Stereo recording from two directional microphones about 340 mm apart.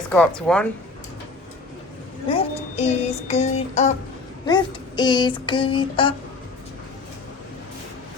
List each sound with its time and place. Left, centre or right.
0.1 s a woman's voice: centre
2.3 s child singing: centre
4.4 s a sound: centre